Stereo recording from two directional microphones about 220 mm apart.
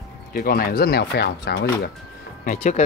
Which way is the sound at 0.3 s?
40° left (ahead or behind).